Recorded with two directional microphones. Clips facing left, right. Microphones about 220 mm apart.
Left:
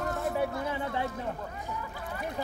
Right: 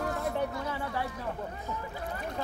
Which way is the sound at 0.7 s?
20° left (ahead or behind).